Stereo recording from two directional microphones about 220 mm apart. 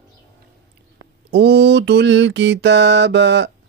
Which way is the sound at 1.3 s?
50° right (ahead or behind).